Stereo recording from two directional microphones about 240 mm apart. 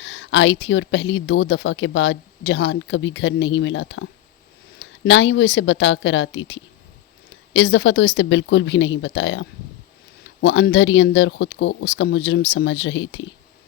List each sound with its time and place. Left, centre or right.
0.0 s speech: left